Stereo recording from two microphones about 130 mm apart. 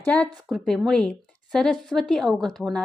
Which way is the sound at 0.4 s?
Centre (ahead or behind).